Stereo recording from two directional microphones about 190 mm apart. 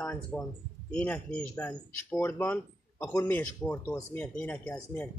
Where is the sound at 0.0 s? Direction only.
5° left (ahead or behind).